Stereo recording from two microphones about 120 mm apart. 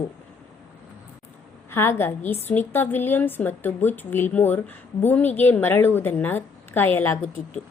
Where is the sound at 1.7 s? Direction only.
20° left (ahead or behind).